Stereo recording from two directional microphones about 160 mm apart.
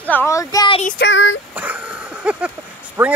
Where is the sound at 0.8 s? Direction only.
90° left.